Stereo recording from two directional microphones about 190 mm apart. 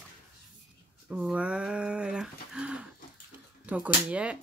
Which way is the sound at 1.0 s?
5° right (ahead or behind).